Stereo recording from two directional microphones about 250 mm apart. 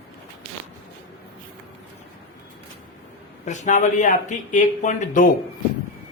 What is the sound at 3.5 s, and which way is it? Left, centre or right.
Speech, left.